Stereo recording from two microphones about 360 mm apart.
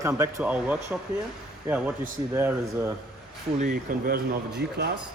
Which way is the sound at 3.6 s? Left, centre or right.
Right.